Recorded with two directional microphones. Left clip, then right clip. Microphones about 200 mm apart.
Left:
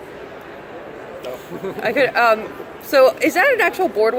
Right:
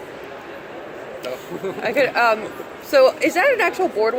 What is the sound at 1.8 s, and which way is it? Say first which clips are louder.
A woman's voice: left 2 dB; 40° left (ahead or behind).